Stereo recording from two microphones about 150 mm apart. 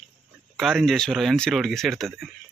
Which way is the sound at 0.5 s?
Centre (ahead or behind).